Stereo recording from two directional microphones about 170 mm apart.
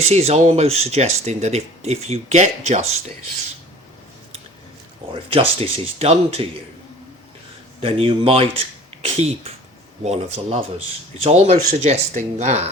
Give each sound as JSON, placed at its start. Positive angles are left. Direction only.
{"t": 0.0, "sound": "speech", "side_deg": -40}
{"t": 5.3, "sound": "speech", "side_deg": -35}
{"t": 7.8, "sound": "speech", "side_deg": -35}